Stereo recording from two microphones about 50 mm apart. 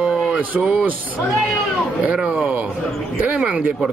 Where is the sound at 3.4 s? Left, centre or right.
Centre.